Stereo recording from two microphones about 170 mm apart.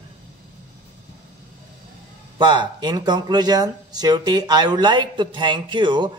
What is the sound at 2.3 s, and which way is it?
A man's voice, 25° right (ahead or behind).